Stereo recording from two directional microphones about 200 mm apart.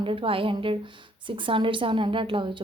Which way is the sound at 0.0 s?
25° right (ahead or behind).